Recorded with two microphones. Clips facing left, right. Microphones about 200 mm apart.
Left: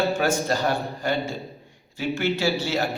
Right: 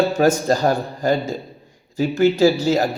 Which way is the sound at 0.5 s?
40° right (ahead or behind).